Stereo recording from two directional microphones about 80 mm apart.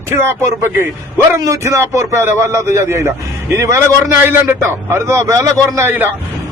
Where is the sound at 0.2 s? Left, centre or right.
Right.